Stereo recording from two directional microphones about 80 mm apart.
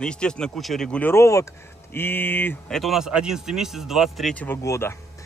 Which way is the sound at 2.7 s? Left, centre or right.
Centre.